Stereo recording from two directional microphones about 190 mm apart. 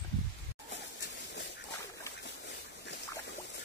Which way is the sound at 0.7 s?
70° left (ahead or behind).